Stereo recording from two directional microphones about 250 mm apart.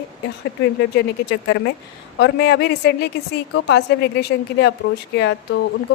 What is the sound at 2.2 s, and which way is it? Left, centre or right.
A woman's voice, left.